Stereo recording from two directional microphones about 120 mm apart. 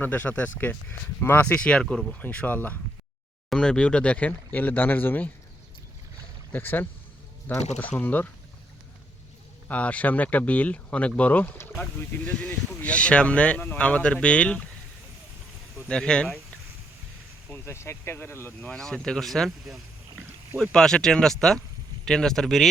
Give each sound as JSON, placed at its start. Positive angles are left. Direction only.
{"t": 0.0, "sound": "speech", "side_deg": 15}
{"t": 6.5, "sound": "speech", "side_deg": 15}
{"t": 9.6, "sound": "speech", "side_deg": 10}
{"t": 15.9, "sound": "speech", "side_deg": 5}
{"t": 17.5, "sound": "speech", "side_deg": 20}
{"t": 18.7, "sound": "speech", "side_deg": 5}